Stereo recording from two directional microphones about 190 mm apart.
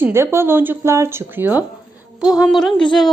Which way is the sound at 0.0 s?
15° right (ahead or behind).